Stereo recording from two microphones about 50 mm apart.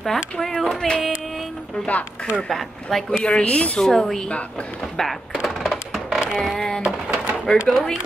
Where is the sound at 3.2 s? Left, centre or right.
Left.